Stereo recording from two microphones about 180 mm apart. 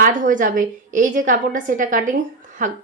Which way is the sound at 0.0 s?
50° right (ahead or behind).